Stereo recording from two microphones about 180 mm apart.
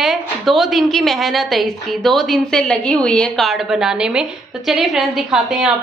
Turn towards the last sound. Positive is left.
turn(degrees=-5)  # may be behind; listen again after turning